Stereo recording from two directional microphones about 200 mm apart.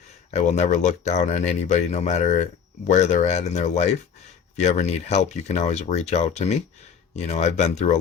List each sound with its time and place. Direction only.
0.3 s speech: 35° left (ahead or behind)